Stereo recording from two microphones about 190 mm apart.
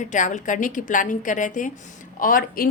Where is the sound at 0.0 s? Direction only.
40° left (ahead or behind).